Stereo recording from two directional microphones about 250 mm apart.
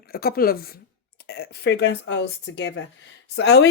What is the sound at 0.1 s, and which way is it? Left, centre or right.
Speech, left.